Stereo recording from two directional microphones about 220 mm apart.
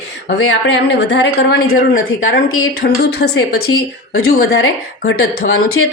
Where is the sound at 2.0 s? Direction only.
65° left (ahead or behind).